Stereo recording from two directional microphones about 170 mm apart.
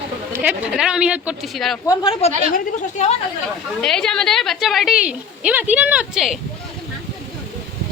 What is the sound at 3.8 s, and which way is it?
A woman's voice, 5° left (ahead or behind).